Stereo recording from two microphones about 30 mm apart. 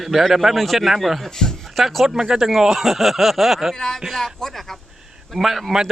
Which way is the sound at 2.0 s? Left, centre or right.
Right.